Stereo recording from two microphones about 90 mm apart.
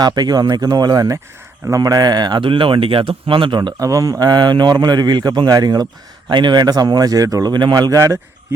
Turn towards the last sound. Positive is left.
turn(degrees=-50)  # may be behind; listen again after turning